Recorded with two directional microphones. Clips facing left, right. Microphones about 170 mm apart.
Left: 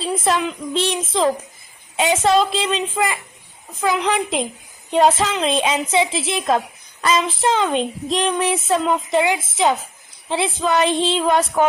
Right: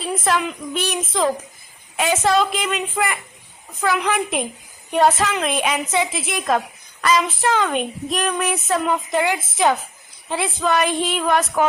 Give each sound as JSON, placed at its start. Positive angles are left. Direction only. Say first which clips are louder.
{"t": 0.2, "sound": "speech", "louder": "left 1 dB", "side_deg": 20}